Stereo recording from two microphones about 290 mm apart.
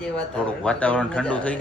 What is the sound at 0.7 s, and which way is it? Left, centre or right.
Speech, centre.